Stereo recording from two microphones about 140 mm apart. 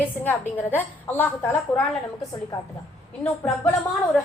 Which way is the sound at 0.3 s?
15° left (ahead or behind).